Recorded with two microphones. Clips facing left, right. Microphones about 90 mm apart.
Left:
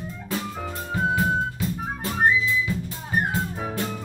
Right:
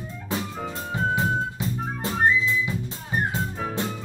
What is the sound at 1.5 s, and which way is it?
Music, 25° right (ahead or behind).